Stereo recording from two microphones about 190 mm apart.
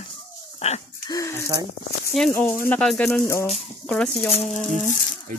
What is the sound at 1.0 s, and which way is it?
Speech, 15° left (ahead or behind).